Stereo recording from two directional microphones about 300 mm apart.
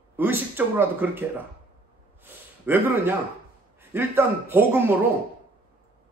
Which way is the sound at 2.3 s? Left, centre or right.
Centre.